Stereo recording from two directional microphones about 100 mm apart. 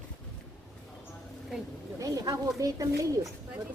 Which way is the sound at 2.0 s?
40° right (ahead or behind).